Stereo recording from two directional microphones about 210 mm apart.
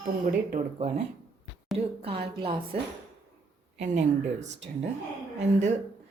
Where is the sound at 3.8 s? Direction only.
35° right (ahead or behind).